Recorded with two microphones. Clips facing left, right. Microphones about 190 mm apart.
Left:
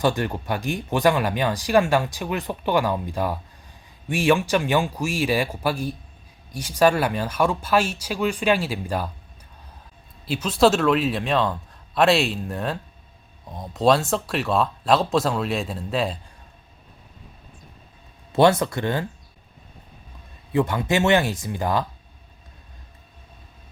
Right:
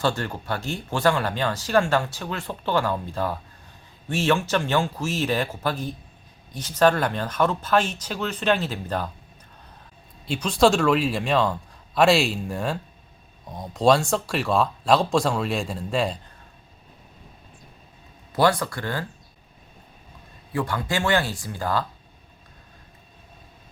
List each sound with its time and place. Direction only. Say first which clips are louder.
0.0 s speech: left 3 dB; 15° left (ahead or behind)
10.2 s speech: left 1 dB; 5° left (ahead or behind)
18.3 s speech: left 4 dB; 25° left (ahead or behind)
20.5 s speech: left 5 dB; 20° left (ahead or behind)